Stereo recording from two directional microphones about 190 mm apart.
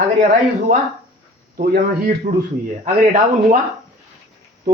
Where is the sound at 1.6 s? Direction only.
55° right (ahead or behind).